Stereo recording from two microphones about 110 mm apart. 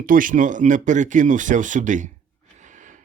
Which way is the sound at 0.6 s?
90° right.